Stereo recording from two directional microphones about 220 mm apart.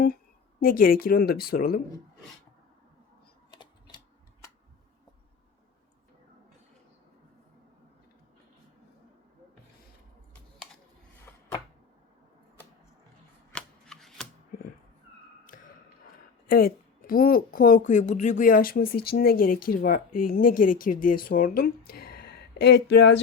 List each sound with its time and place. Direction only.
0.6 s a woman's voice: 40° left (ahead or behind)
3.5 s a sound: 20° left (ahead or behind)
13.5 s shuffling cards: 5° left (ahead or behind)
16.5 s a woman's voice: 40° left (ahead or behind)